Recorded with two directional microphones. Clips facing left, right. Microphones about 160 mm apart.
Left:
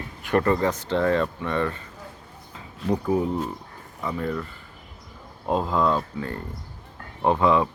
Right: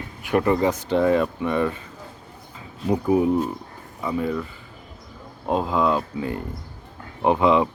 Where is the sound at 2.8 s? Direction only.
10° right (ahead or behind).